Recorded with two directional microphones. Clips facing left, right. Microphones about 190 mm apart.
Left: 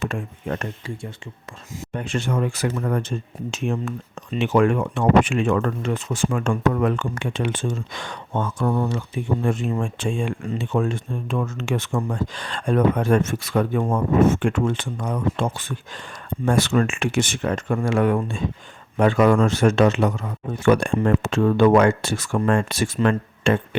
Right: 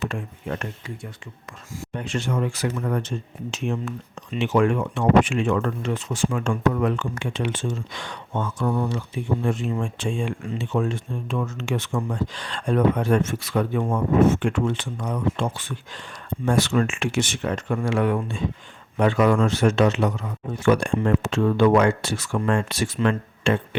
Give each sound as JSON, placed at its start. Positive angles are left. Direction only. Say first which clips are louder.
{"t": 0.0, "sound": "speech", "louder": "left 2 dB", "side_deg": 45}
{"t": 1.9, "sound": "speech", "louder": "left 2 dB", "side_deg": 50}